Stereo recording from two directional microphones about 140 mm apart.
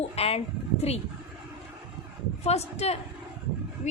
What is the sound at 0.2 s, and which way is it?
Speech, 45° left (ahead or behind).